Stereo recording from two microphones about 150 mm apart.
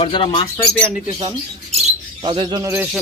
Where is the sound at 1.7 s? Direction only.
45° right (ahead or behind).